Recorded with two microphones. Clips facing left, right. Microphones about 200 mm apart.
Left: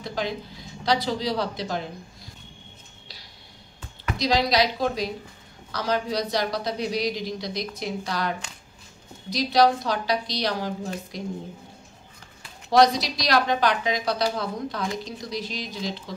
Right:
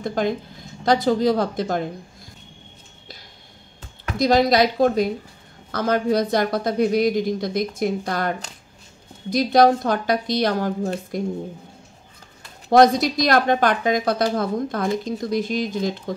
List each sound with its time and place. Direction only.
0.0 s speech: 50° right (ahead or behind)
4.2 s a woman's voice: 50° right (ahead or behind)
12.7 s a woman's voice: 50° right (ahead or behind)